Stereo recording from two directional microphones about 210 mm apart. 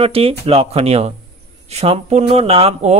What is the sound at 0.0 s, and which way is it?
Speech, 25° right (ahead or behind).